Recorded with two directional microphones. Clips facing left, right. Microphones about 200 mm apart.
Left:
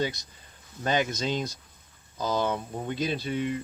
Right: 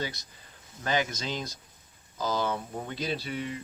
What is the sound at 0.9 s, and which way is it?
Speech, 20° left (ahead or behind).